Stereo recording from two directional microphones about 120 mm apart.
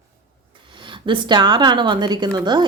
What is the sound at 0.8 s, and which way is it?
A woman's voice, 45° right (ahead or behind).